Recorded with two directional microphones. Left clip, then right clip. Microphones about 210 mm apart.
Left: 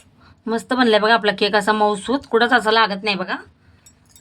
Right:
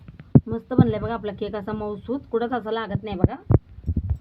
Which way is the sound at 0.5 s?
25° left (ahead or behind).